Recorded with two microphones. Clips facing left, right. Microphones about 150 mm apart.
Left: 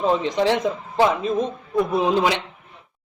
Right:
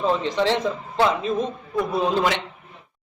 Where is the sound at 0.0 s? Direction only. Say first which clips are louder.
Left 2 dB; 15° left (ahead or behind).